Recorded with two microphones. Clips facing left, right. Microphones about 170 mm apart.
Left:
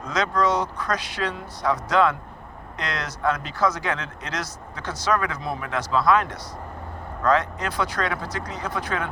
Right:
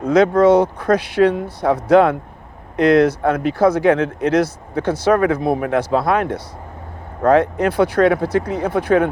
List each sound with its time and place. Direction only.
0.0 s speech: 55° right (ahead or behind)